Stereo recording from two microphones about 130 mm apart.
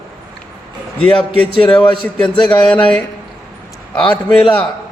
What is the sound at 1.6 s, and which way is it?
A man's voice, 40° left (ahead or behind).